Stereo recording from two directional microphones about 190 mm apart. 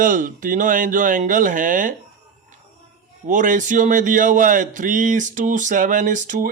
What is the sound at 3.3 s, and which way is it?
A man's voice, 45° right (ahead or behind).